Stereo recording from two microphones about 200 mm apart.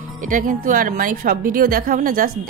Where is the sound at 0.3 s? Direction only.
40° right (ahead or behind).